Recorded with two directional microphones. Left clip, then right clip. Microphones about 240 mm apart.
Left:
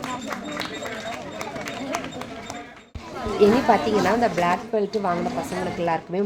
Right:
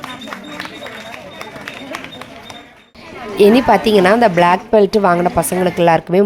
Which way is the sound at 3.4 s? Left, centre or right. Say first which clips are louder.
Right 8 dB; right.